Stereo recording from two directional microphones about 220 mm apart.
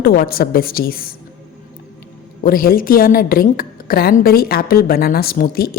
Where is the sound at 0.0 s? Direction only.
40° left (ahead or behind).